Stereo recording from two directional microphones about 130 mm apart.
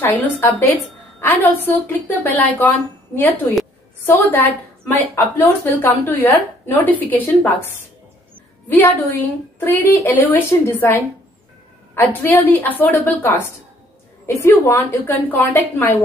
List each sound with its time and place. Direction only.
0.0 s a woman's voice: 20° left (ahead or behind)
4.0 s a woman's voice: 15° left (ahead or behind)
8.6 s a woman's voice: 15° left (ahead or behind)